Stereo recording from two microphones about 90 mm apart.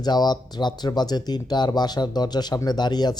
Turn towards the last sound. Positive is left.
turn(degrees=50)  # may be behind; listen again after turning